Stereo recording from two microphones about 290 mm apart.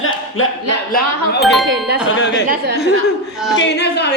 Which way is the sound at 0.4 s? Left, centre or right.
Left.